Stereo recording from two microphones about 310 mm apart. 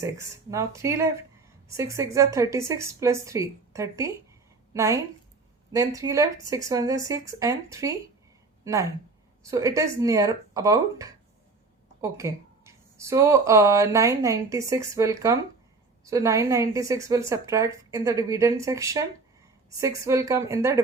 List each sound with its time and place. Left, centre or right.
0.0 s a woman's voice: centre